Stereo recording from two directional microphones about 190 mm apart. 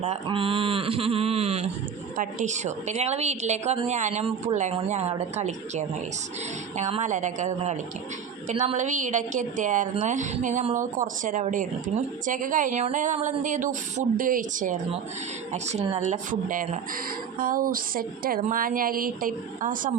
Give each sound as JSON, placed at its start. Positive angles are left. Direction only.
{"t": 0.0, "sound": "a woman's voice", "side_deg": -30}